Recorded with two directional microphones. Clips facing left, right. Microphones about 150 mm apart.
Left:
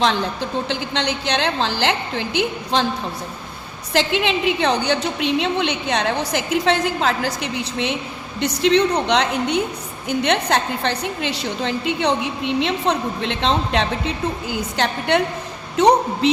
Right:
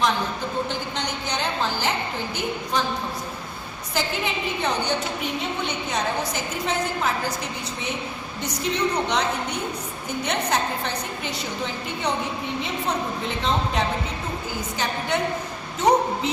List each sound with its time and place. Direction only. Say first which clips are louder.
0.7 s a woman's voice: left 5 dB; 90° left
3.9 s a woman's voice: left 7 dB; 85° left